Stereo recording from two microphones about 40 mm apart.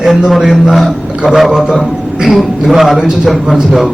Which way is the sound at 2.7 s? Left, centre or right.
Centre.